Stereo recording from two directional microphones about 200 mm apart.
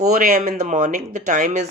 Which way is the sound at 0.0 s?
40° right (ahead or behind).